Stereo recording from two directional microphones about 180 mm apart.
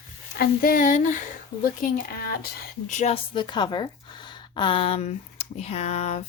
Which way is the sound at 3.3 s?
25° left (ahead or behind).